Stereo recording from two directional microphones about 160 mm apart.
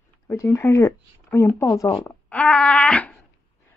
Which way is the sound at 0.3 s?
20° left (ahead or behind).